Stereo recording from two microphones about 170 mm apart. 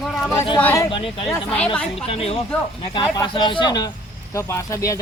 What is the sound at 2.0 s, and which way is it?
A man's voice, 35° left (ahead or behind).